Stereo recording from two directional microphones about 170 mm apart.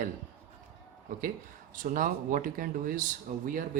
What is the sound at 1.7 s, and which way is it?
Speech, 50° right (ahead or behind).